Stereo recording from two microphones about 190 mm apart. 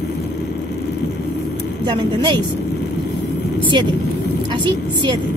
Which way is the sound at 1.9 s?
25° right (ahead or behind).